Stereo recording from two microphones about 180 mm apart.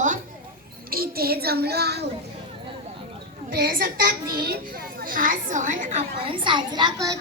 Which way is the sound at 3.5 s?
55° right (ahead or behind).